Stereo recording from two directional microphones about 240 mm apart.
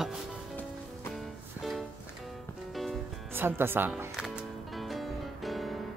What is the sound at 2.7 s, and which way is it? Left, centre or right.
Music, centre.